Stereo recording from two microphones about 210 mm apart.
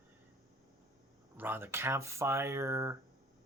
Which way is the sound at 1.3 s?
10° right (ahead or behind).